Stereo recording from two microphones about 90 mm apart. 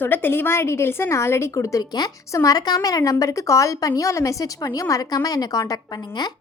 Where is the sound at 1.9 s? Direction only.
50° left (ahead or behind).